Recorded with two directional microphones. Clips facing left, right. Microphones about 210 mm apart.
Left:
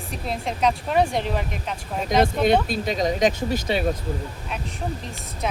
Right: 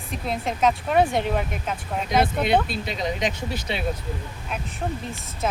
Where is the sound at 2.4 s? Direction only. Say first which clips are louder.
Left 3 dB; 40° left (ahead or behind).